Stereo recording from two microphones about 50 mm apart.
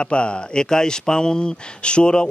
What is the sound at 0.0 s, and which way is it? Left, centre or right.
Speech, left.